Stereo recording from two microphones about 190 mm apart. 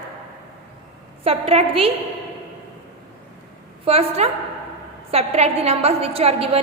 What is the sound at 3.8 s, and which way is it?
A woman's voice, 30° right (ahead or behind).